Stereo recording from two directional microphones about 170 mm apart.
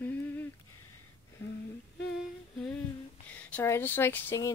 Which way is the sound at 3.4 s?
10° left (ahead or behind).